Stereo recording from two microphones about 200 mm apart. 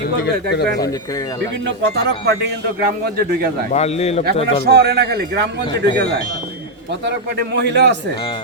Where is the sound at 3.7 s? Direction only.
30° left (ahead or behind).